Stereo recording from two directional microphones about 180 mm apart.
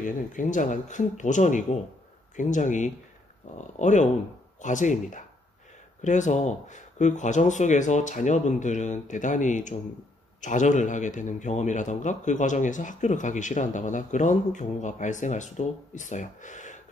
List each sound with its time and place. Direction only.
0.0 s a man's voice: 45° left (ahead or behind)